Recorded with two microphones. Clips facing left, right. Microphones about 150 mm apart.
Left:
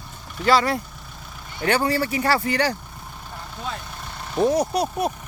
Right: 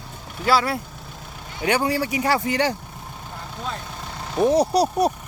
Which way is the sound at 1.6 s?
15° right (ahead or behind).